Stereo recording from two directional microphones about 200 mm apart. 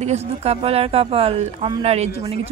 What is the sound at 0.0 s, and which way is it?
Speech, 30° right (ahead or behind).